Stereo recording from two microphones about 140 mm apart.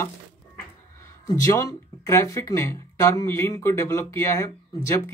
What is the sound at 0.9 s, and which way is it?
Speech, 20° left (ahead or behind).